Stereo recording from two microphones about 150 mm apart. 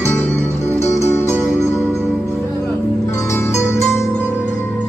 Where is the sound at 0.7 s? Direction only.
45° left (ahead or behind).